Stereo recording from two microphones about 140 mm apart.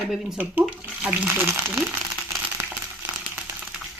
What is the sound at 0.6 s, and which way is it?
Crumpling, 5° right (ahead or behind).